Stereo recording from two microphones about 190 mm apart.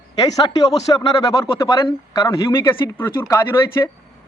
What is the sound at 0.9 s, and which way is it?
Speech, 25° left (ahead or behind).